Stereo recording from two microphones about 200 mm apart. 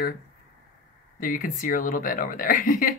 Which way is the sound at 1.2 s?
45° left (ahead or behind).